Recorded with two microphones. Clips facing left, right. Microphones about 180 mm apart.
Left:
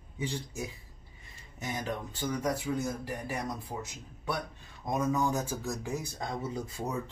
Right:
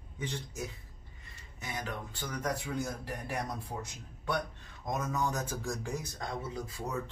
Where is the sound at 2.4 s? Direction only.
5° left (ahead or behind).